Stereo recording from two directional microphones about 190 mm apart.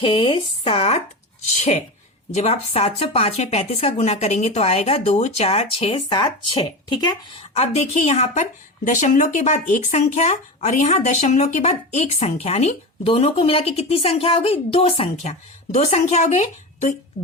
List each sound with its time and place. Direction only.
0.0 s speech: 30° left (ahead or behind)